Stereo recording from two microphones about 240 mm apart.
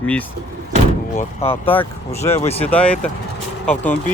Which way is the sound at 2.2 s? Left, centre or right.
Centre.